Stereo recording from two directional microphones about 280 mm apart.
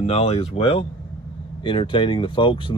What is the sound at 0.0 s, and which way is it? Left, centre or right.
Speech, left.